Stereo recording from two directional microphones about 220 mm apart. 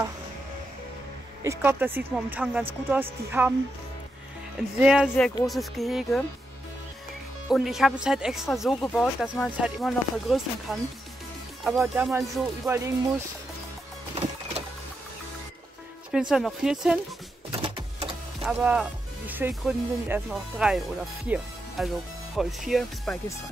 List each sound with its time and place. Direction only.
1.4 s speech: 10° right (ahead or behind)
4.7 s speech: 5° right (ahead or behind)
7.4 s speech: centre (ahead or behind)
12.1 s speech: 10° right (ahead or behind)
14.1 s music: 25° right (ahead or behind)
16.1 s speech: 5° right (ahead or behind)
17.5 s a sound: 25° right (ahead or behind)
18.4 s speech: 5° right (ahead or behind)